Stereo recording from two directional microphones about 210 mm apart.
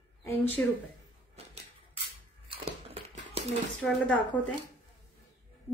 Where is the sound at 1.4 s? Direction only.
30° right (ahead or behind).